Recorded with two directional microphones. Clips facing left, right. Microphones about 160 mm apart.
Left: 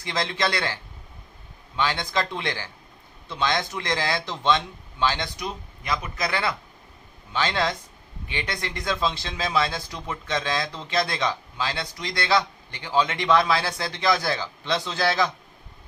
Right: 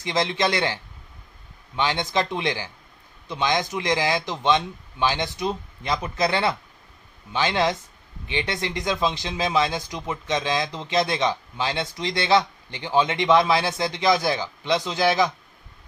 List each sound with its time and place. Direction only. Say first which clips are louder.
0.0 s speech: right 3 dB; 20° right (ahead or behind)